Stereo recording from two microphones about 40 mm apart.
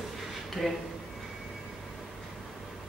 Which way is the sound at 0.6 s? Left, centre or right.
Centre.